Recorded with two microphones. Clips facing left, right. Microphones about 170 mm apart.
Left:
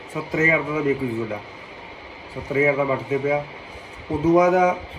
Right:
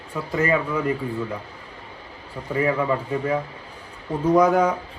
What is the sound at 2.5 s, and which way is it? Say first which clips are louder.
A man's voice: left 2 dB; 15° left (ahead or behind).